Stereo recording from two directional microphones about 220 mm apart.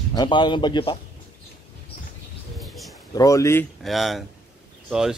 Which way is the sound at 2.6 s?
Centre (ahead or behind).